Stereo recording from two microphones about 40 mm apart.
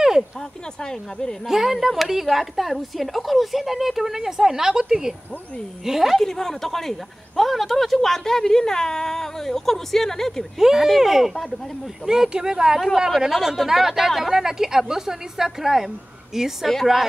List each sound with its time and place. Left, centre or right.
1.5 s a woman's voice: centre
6.1 s speech: centre
10.6 s a woman's voice: centre
12.7 s a woman's voice: centre